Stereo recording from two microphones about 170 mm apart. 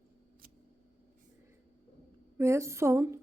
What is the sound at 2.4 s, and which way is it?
Speech, 15° right (ahead or behind).